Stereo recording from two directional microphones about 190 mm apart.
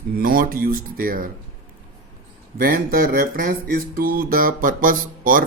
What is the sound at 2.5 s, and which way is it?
Music, 50° right (ahead or behind).